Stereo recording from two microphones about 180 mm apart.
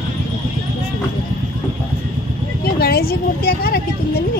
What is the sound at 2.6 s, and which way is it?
Vehicle, 60° left (ahead or behind).